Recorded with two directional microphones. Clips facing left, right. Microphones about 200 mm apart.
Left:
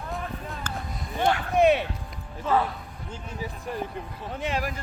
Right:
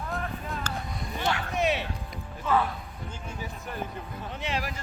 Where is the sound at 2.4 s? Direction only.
35° left (ahead or behind).